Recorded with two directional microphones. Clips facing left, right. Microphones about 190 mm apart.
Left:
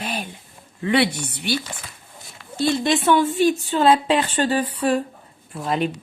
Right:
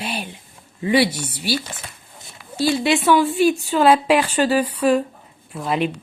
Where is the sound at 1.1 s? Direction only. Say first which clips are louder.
Right 1 dB; 5° right (ahead or behind).